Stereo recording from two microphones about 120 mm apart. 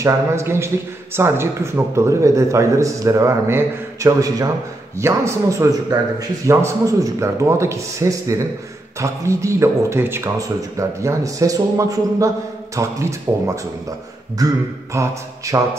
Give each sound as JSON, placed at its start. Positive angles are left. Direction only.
{"t": 0.0, "sound": "a man's voice", "side_deg": -20}